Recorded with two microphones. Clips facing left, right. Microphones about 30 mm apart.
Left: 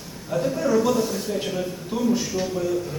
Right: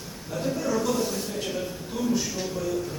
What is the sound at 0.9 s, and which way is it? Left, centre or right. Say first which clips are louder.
A man's voice: left 4 dB; centre.